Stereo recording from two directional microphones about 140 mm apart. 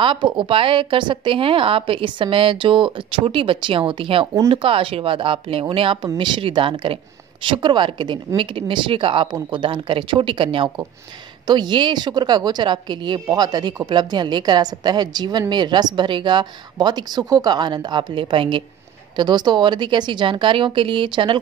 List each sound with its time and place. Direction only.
0.0 s a woman's voice: 35° right (ahead or behind)